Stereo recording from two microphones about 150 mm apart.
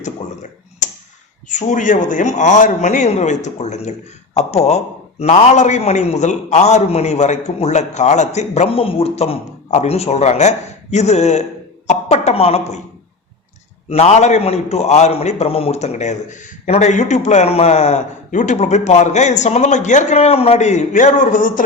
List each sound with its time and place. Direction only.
0.8 s a sound: 55° left (ahead or behind)
1.5 s a man's voice: 55° left (ahead or behind)
13.9 s a man's voice: 45° left (ahead or behind)
21.3 s a man's voice: 65° left (ahead or behind)